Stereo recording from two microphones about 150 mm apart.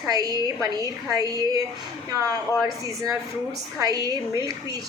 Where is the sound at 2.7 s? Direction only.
20° right (ahead or behind).